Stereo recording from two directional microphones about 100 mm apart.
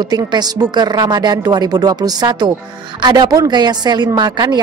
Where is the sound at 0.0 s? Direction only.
45° right (ahead or behind).